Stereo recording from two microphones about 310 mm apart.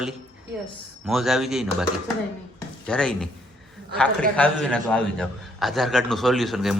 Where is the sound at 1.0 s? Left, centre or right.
Centre.